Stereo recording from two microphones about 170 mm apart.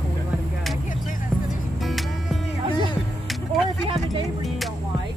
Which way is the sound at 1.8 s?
Centre (ahead or behind).